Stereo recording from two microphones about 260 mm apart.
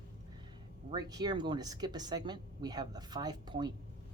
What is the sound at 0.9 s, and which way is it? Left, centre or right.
A woman's voice, centre.